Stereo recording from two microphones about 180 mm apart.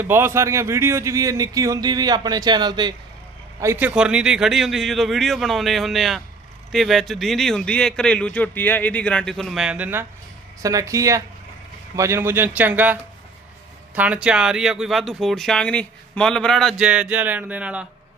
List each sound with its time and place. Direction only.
0.0 s speech: 15° right (ahead or behind)
3.6 s a man's voice: 10° right (ahead or behind)